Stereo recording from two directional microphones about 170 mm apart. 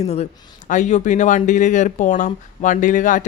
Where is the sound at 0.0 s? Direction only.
40° left (ahead or behind).